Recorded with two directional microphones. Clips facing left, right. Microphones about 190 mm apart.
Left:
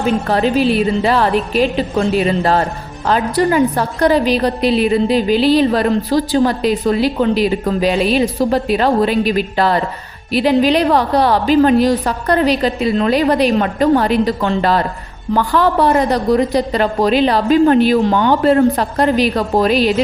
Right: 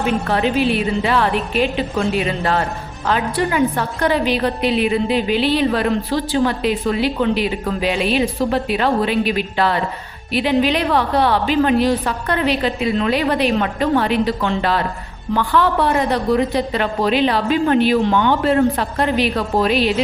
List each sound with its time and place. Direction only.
0.0 s a woman's voice: 35° left (ahead or behind)